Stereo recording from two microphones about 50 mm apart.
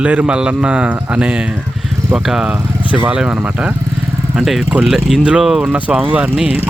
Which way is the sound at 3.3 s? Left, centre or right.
Right.